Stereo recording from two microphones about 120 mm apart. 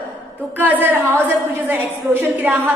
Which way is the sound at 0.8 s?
15° right (ahead or behind).